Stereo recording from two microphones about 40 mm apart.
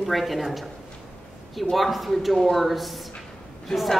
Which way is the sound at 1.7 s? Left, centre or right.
Centre.